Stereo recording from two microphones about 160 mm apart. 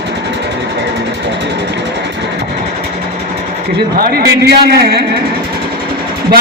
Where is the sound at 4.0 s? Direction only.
70° right (ahead or behind).